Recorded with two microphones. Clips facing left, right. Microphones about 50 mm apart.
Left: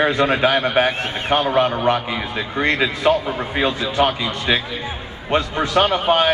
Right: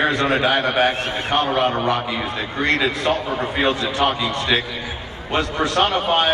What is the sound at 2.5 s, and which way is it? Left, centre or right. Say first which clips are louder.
Speech: left 1 dB; centre.